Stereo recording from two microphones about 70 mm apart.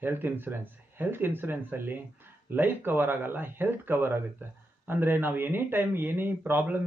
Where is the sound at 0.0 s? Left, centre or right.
Right.